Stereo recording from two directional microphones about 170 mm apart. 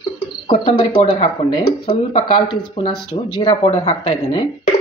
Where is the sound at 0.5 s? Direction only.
35° left (ahead or behind).